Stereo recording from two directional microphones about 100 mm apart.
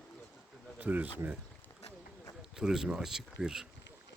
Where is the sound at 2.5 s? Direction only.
5° right (ahead or behind).